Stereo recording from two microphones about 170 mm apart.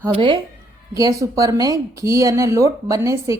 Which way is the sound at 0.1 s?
30° right (ahead or behind).